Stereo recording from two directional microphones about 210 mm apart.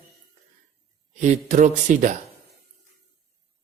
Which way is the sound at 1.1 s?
35° right (ahead or behind).